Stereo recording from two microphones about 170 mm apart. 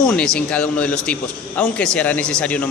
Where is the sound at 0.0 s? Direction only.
5° left (ahead or behind).